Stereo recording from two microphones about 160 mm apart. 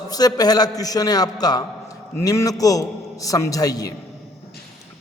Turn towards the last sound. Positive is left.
turn(degrees=20)  # may be behind; listen again after turning